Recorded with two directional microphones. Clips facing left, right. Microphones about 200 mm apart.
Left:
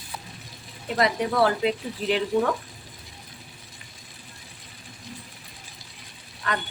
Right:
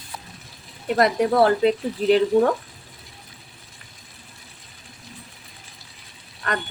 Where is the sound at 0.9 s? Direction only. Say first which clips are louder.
Right 5 dB; 45° right (ahead or behind).